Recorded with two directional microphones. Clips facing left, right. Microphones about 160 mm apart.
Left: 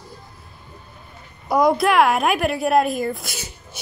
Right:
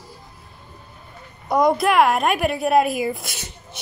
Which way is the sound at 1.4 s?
Centre (ahead or behind).